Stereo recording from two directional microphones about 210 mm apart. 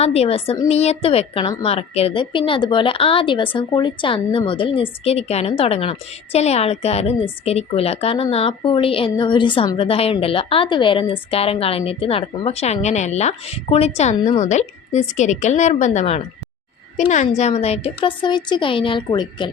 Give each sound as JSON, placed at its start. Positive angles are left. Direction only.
{"t": 0.0, "sound": "a woman's voice", "side_deg": 30}